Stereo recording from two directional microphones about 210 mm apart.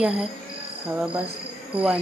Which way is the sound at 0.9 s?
5° right (ahead or behind).